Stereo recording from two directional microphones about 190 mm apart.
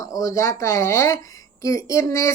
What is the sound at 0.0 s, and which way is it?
A woman's voice, 15° left (ahead or behind).